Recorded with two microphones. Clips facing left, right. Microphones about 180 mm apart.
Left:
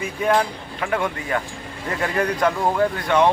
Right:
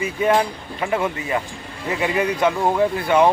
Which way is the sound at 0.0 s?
5° right (ahead or behind).